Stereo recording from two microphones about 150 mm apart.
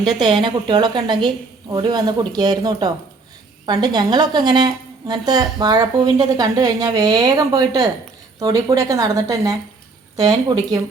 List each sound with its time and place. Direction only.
0.0 s a woman's voice: 30° right (ahead or behind)